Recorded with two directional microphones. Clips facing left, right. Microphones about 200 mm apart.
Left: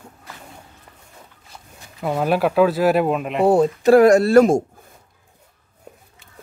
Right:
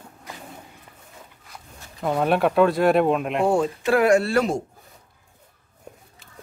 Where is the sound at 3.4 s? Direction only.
40° left (ahead or behind).